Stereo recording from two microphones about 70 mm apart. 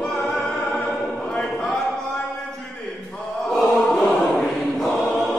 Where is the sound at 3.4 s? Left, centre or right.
Centre.